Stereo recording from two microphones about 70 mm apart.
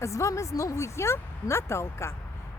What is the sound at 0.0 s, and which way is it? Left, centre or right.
Speech, left.